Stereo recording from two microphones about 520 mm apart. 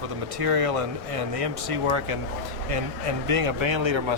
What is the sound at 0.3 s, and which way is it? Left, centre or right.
Speech, right.